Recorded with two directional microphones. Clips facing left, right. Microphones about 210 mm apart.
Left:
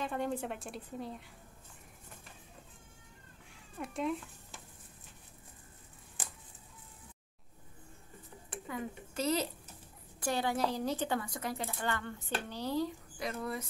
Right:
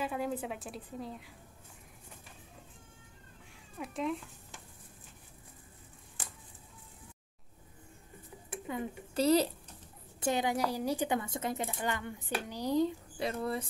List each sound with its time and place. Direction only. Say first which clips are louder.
0.0 s a woman's voice: right 1 dB; 5° right (ahead or behind)
3.7 s speech: even; centre (ahead or behind)
8.5 s speech: right 3 dB; 25° right (ahead or behind)
10.2 s speech: right 2 dB; 15° right (ahead or behind)